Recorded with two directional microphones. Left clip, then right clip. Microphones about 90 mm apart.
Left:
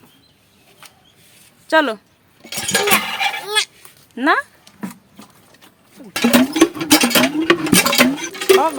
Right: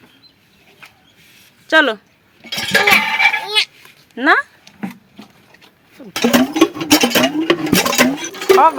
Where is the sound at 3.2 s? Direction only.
35° left (ahead or behind).